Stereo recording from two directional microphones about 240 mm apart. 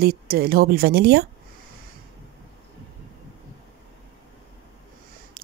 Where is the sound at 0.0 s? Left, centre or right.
Right.